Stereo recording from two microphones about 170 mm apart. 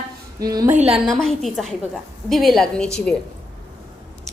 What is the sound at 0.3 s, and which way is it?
Speech, 20° right (ahead or behind).